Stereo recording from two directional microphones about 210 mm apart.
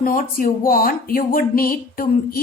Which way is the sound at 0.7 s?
45° left (ahead or behind).